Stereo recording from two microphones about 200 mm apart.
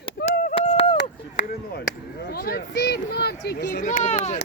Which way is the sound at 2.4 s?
55° left (ahead or behind).